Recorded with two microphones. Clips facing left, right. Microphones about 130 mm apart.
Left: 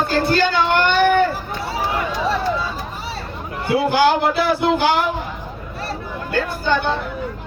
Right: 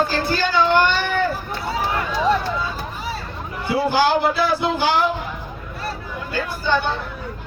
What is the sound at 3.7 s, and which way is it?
Speech, 55° left (ahead or behind).